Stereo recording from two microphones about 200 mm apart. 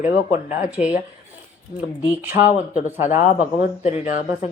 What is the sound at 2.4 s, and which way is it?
Speech, 40° left (ahead or behind).